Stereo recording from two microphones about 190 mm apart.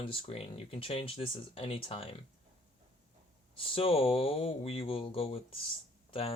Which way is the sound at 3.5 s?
30° left (ahead or behind).